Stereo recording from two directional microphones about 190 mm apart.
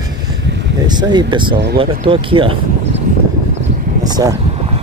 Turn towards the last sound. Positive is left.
turn(degrees=-20)  # may be behind; listen again after turning